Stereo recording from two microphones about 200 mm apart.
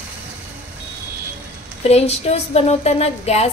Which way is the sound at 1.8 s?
30° left (ahead or behind).